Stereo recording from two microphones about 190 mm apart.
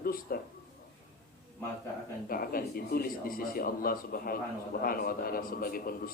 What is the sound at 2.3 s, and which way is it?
A man's voice, 50° left (ahead or behind).